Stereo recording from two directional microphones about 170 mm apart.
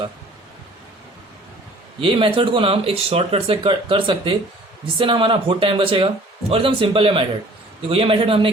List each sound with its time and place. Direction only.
2.0 s speech: 30° right (ahead or behind)